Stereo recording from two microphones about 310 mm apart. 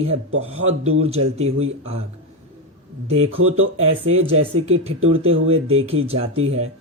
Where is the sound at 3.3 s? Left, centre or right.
Right.